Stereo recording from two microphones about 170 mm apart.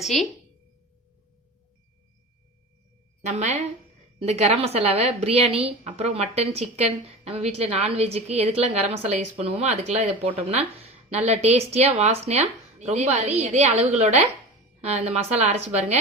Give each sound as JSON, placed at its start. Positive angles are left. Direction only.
{"t": 0.0, "sound": "a woman's voice", "side_deg": 0}
{"t": 3.2, "sound": "a woman's voice", "side_deg": -40}